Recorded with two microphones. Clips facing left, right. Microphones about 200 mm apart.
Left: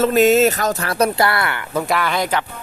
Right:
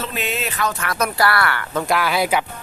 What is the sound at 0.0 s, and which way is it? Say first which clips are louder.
Speech: left 13 dB; 45° left (ahead or behind).